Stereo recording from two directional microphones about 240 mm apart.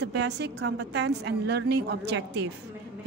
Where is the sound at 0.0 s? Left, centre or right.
Right.